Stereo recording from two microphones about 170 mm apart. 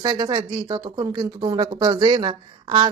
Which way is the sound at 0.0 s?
25° right (ahead or behind).